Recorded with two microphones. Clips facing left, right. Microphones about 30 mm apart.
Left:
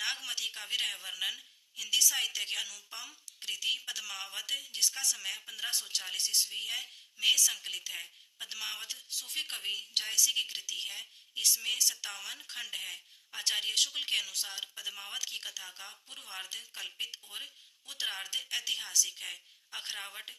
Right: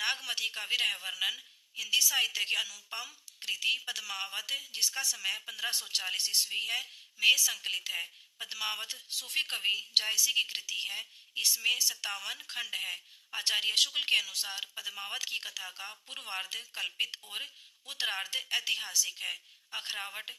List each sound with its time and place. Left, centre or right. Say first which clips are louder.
0.0 s a sound: right 3 dB; centre
0.3 s speech: right 3 dB; centre
6.3 s speech: left 1 dB; right
6.6 s speech: right 3 dB; centre
7.6 s speech: right 5 dB; right
8.4 s speech: right 4 dB; centre
8.9 s speech: right 3 dB; right
9.5 s speech: right 6 dB; centre
16.0 s speech: right 7 dB; right
16.4 s speech: right 3 dB; centre
18.8 s speech: even; centre